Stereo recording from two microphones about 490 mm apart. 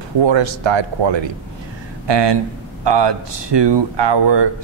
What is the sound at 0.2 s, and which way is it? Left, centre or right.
Speech, right.